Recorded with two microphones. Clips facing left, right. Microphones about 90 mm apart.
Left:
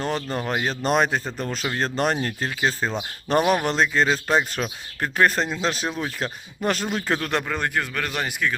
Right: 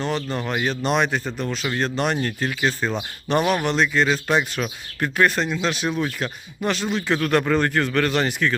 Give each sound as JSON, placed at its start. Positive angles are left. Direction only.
{"t": 0.3, "sound": "speech", "side_deg": 35}
{"t": 7.2, "sound": "a man's voice", "side_deg": 20}